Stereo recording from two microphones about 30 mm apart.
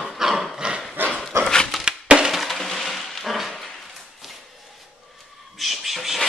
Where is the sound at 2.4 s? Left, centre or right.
Centre.